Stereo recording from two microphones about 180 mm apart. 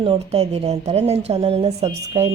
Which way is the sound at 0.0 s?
30° right (ahead or behind).